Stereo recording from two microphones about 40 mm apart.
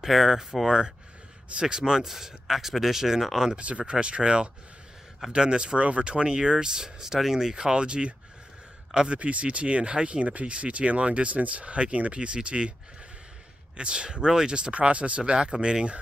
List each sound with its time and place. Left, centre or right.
0.0 s speech: centre
3.5 s speech: right
5.8 s speech: right
13.7 s speech: right